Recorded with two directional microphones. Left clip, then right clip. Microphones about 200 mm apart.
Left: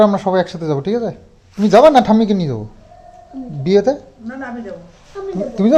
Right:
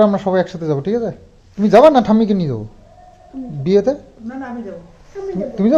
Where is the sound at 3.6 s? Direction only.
20° left (ahead or behind).